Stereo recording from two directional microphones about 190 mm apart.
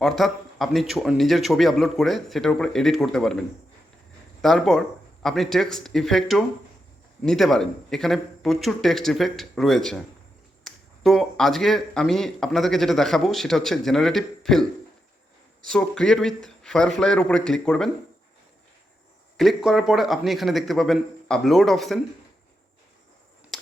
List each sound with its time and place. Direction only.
0.0 s speech: centre (ahead or behind)
4.4 s speech: centre (ahead or behind)
15.6 s speech: 5° left (ahead or behind)
19.4 s speech: centre (ahead or behind)